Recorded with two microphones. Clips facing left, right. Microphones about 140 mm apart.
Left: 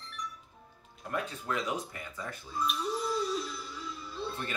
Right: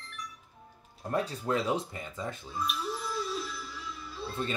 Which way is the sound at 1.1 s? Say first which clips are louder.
Right 5 dB; 35° right (ahead or behind).